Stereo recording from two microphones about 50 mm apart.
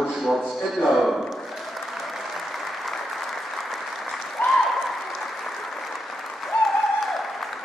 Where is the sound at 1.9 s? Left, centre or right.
Centre.